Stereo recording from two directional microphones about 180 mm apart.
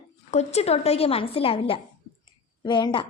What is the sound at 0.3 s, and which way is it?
A woman's voice, 35° left (ahead or behind).